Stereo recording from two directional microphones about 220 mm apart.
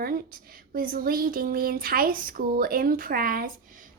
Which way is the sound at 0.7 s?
40° right (ahead or behind).